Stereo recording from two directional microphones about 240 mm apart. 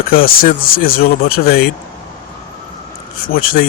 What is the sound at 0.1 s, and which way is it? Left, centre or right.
Speech, left.